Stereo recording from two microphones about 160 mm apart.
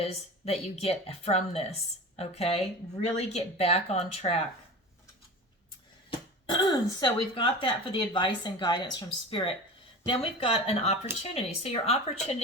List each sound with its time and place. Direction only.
0.0 s speech: 40° left (ahead or behind)
6.1 s speech: 30° left (ahead or behind)